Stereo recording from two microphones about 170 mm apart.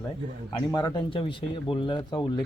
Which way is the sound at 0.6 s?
25° left (ahead or behind).